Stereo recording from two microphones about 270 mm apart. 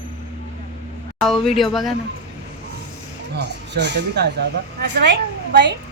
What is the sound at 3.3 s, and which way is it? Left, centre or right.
Speech, right.